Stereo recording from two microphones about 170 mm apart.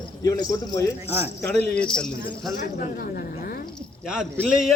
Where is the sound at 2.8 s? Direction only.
60° left (ahead or behind).